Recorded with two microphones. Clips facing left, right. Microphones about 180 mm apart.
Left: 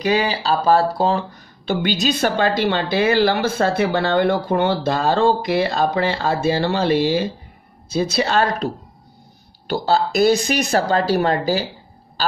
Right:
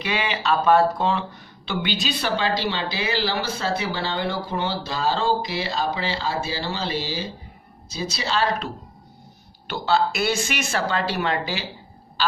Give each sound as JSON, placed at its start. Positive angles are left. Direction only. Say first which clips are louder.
{"t": 0.0, "sound": "a woman's voice", "louder": "left 6 dB", "side_deg": 35}